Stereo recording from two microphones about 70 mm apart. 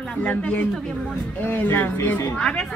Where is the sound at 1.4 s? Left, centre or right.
Left.